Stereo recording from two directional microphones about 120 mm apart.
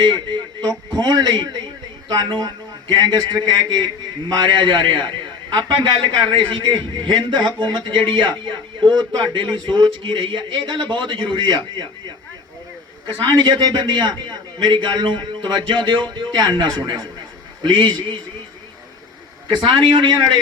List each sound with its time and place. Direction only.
0.0 s a man's voice: 40° right (ahead or behind)
13.2 s a man's voice: 35° right (ahead or behind)
19.5 s a man's voice: 40° right (ahead or behind)